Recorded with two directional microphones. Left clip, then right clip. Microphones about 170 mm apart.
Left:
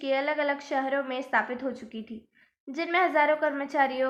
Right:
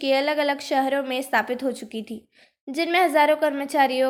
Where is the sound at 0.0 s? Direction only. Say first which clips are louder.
Right 5 dB; 40° right (ahead or behind).